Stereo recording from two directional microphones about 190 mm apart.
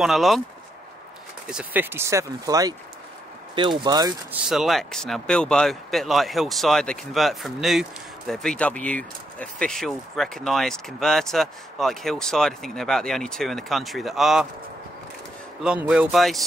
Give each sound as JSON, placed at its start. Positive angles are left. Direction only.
{"t": 0.0, "sound": "speech", "side_deg": 0}
{"t": 1.5, "sound": "speech", "side_deg": -5}
{"t": 4.3, "sound": "speech", "side_deg": 0}
{"t": 15.9, "sound": "speech", "side_deg": -5}